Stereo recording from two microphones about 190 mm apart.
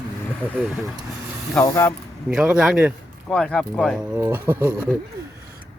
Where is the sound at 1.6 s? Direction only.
15° left (ahead or behind).